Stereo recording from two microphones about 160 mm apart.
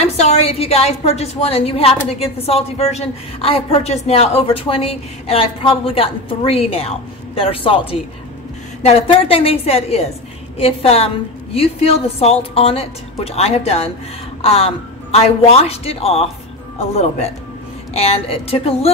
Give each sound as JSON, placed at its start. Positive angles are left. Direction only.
{"t": 0.0, "sound": "a woman's voice", "side_deg": 40}
{"t": 17.9, "sound": "a woman's voice", "side_deg": 40}